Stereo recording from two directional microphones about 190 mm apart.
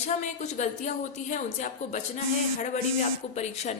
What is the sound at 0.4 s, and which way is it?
A woman's voice, 40° left (ahead or behind).